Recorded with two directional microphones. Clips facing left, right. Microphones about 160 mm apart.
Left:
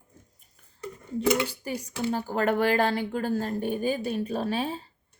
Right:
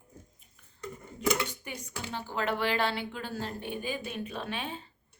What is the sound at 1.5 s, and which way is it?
Speech, 35° left (ahead or behind).